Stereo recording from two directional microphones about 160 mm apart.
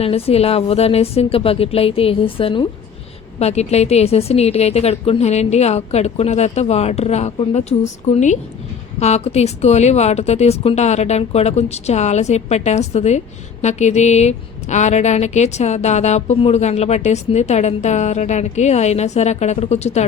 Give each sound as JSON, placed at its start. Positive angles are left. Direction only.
{"t": 0.0, "sound": "a woman's voice", "side_deg": 40}